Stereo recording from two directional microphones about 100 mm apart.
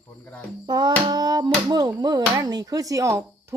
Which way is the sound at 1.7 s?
40° right (ahead or behind).